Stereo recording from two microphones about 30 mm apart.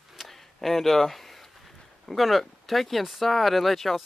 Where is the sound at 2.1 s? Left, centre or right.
Centre.